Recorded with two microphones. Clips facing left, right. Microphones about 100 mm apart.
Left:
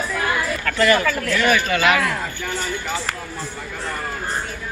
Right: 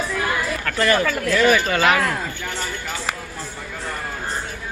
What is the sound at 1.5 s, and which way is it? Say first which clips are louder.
Speech: even; 35° right (ahead or behind).